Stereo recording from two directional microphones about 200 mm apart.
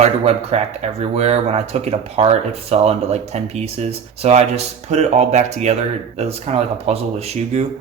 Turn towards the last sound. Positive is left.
turn(degrees=-30)  # may be behind; listen again after turning